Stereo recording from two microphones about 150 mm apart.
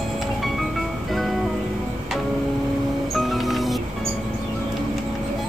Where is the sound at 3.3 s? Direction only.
Centre (ahead or behind).